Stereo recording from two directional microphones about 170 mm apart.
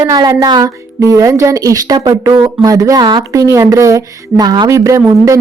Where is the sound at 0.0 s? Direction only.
20° right (ahead or behind).